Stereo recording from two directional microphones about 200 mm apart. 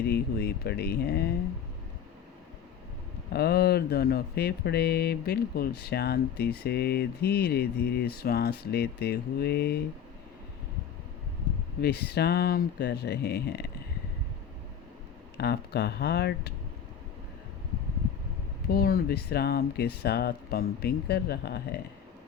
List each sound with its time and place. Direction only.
0.1 s speech: 55° left (ahead or behind)
3.3 s speech: 50° left (ahead or behind)
11.8 s speech: 55° left (ahead or behind)
15.4 s speech: 55° left (ahead or behind)
18.7 s speech: 50° left (ahead or behind)